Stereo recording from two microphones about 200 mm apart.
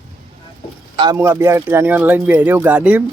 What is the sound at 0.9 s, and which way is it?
Speech, 25° right (ahead or behind).